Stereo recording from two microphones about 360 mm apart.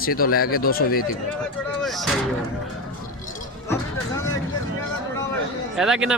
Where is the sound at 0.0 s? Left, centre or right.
Left.